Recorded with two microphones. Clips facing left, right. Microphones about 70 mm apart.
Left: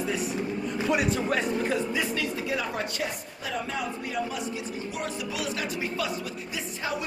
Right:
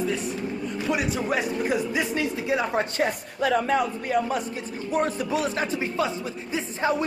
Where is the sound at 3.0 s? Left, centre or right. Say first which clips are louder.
Right 8 dB; right.